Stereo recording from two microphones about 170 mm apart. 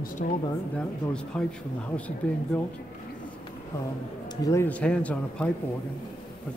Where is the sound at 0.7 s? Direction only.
5° left (ahead or behind).